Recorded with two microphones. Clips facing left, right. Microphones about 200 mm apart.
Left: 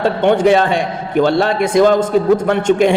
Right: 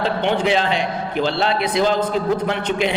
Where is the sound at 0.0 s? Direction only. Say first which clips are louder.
Left 7 dB; 50° left (ahead or behind).